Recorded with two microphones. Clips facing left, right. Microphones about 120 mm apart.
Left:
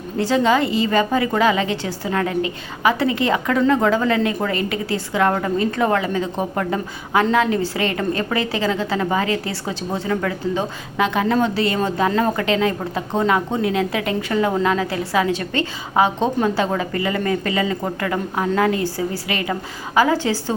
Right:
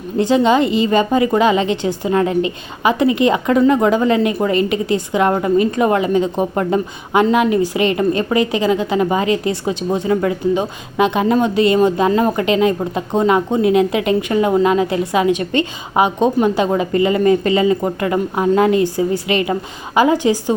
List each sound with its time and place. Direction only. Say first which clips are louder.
0.2 s a woman's voice: right 4 dB; 20° right (ahead or behind)